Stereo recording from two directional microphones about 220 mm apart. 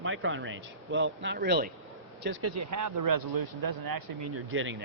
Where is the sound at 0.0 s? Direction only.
60° right (ahead or behind).